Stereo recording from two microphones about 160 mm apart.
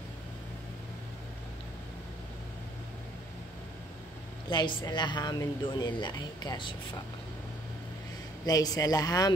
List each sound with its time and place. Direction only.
4.5 s a woman's voice: 25° left (ahead or behind)
8.5 s a woman's voice: 25° left (ahead or behind)